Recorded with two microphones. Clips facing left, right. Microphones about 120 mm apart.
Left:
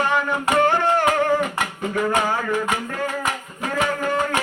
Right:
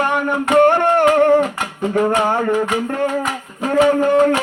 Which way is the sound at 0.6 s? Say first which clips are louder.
Right 7 dB; 60° right (ahead or behind).